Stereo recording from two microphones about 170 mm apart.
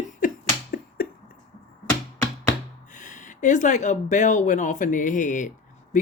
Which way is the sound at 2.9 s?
50° left (ahead or behind).